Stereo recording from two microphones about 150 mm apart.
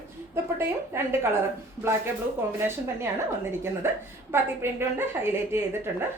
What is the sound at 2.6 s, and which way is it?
Speech, 15° right (ahead or behind).